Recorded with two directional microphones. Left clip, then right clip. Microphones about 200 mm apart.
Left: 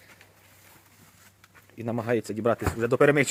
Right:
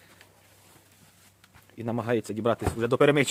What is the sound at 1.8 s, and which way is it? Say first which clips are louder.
Speech: left 1 dB; centre (ahead or behind).